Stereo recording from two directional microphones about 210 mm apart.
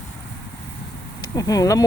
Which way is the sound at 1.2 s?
15° left (ahead or behind).